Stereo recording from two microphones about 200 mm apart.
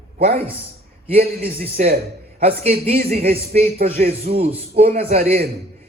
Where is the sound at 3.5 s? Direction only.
30° right (ahead or behind).